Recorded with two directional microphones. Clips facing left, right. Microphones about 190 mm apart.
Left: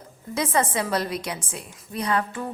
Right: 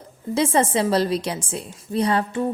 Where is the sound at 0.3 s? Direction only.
30° right (ahead or behind).